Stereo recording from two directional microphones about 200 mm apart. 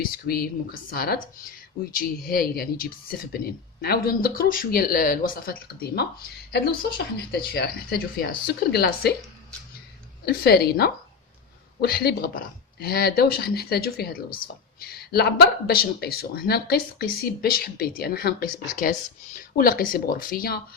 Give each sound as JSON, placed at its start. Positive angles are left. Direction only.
{"t": 0.0, "sound": "speech", "side_deg": 50}
{"t": 7.3, "sound": "speech", "side_deg": 50}
{"t": 10.2, "sound": "speech", "side_deg": 50}